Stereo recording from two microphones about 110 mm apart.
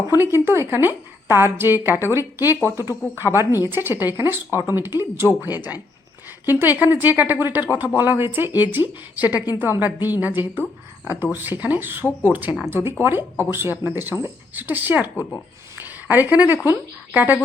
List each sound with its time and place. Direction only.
0.1 s a woman's voice: 25° right (ahead or behind)
6.4 s a woman's voice: 20° right (ahead or behind)